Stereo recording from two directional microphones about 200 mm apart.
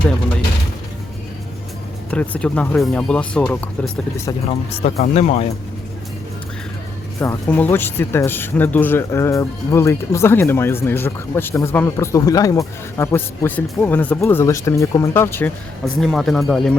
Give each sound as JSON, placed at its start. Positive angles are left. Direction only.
{"t": 2.0, "sound": "speech", "side_deg": 5}
{"t": 4.4, "sound": "speech", "side_deg": 30}
{"t": 7.2, "sound": "speech", "side_deg": 10}